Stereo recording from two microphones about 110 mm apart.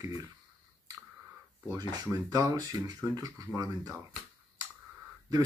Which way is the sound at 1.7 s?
40° right (ahead or behind).